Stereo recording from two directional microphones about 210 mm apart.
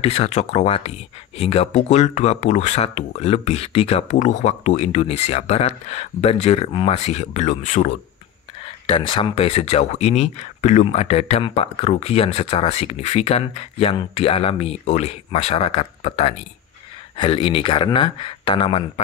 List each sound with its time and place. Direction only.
0.0 s speech: 30° left (ahead or behind)
8.8 s speech: 25° left (ahead or behind)